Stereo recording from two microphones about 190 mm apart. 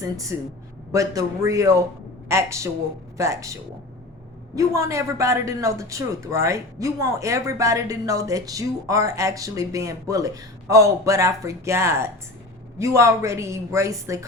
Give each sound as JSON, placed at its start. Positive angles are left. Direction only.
{"t": 0.0, "sound": "speech", "side_deg": -15}